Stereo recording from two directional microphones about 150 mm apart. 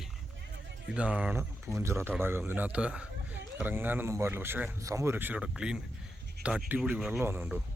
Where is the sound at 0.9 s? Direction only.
10° right (ahead or behind).